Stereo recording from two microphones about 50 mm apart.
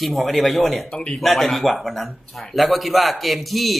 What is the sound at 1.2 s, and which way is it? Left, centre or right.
Speech, centre.